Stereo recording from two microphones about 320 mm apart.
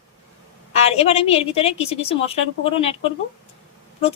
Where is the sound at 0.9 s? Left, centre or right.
Centre.